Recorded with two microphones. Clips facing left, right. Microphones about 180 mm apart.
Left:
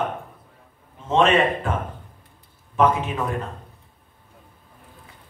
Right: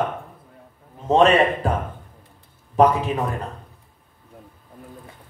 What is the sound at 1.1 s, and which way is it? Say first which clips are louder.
Speech: right 3 dB; 35° right (ahead or behind).